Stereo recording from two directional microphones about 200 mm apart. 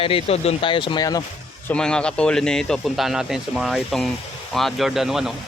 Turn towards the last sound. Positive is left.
turn(degrees=0)  # may be behind; listen again after turning